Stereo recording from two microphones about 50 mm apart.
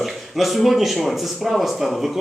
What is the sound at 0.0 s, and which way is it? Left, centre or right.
Speech, centre.